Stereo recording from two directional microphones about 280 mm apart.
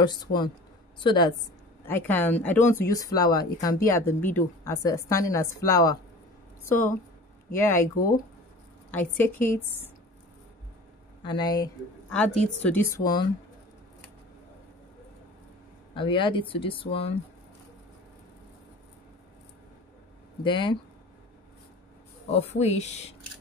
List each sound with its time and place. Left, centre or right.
0.0 s a woman's voice: centre
8.9 s a woman's voice: centre
11.2 s a woman's voice: centre
15.9 s speech: centre
20.4 s a woman's voice: centre
22.3 s speech: left